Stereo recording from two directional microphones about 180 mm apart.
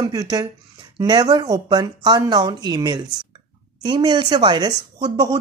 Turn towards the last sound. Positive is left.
turn(degrees=-25)  # may be behind; listen again after turning